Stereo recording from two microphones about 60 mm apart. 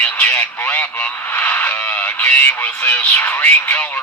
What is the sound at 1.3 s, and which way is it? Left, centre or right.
Speech, left.